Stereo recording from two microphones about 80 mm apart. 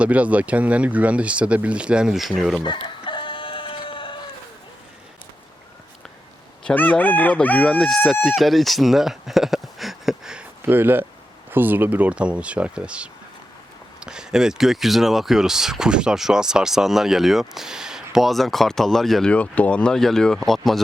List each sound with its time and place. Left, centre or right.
0.0 s speech: centre
2.6 s chicken: left
6.7 s chicken: centre
7.8 s speech: centre
10.6 s speech: right; by 19.3 s centre
19.3 s speech: centre